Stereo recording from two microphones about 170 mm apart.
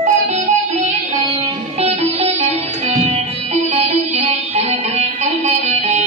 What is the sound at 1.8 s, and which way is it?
Music, 40° right (ahead or behind).